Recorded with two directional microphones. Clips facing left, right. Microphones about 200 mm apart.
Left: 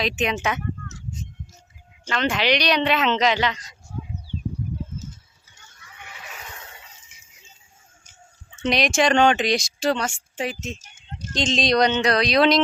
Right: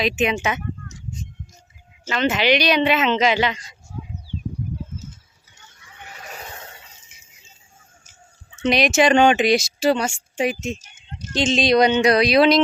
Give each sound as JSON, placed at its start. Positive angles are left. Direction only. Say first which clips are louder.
{"t": 0.0, "sound": "speech", "louder": "right 3 dB", "side_deg": -5}
{"t": 2.0, "sound": "speech", "louder": "right 3 dB", "side_deg": -5}
{"t": 6.1, "sound": "neigh", "louder": "right 4 dB", "side_deg": -40}
{"t": 8.6, "sound": "speech", "louder": "right 3 dB", "side_deg": -5}